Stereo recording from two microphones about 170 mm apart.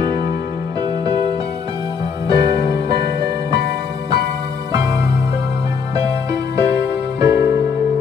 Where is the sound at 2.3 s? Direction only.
25° right (ahead or behind).